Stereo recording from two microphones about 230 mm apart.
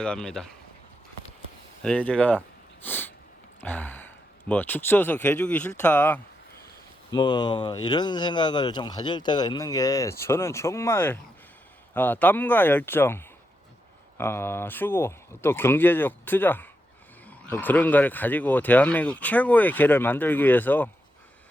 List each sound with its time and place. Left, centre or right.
0.0 s speech: centre
1.8 s speech: centre
2.8 s sniff: centre
3.6 s speech: centre
7.1 s speech: centre